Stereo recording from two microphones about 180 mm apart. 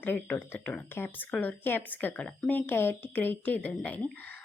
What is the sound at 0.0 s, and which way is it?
Speech, 10° left (ahead or behind).